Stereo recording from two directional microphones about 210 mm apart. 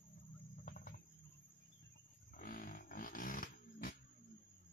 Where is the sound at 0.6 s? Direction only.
40° left (ahead or behind).